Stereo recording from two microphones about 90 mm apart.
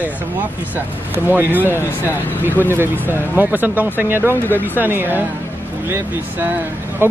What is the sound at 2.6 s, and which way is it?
Speech, 25° right (ahead or behind).